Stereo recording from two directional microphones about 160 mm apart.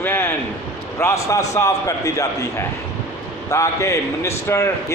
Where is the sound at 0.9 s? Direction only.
15° left (ahead or behind).